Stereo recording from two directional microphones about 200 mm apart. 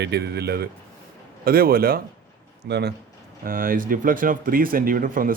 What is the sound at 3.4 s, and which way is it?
Speech, 45° right (ahead or behind).